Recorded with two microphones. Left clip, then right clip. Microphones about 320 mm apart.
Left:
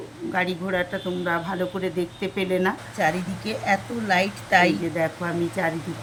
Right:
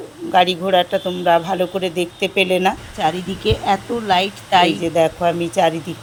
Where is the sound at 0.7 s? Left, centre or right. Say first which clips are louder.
Right 10 dB; right.